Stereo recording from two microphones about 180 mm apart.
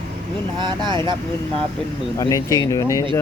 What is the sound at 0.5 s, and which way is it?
Speech, 25° right (ahead or behind).